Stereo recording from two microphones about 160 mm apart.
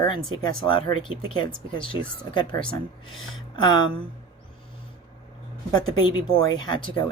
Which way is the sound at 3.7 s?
30° left (ahead or behind).